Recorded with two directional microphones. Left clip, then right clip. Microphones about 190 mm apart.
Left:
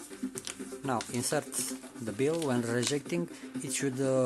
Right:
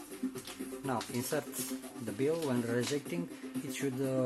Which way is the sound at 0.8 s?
15° left (ahead or behind).